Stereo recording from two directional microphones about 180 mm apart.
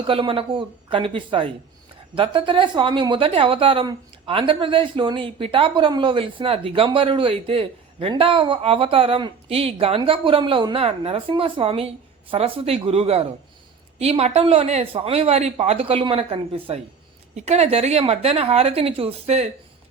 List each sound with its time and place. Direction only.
0.0 s speech: 30° right (ahead or behind)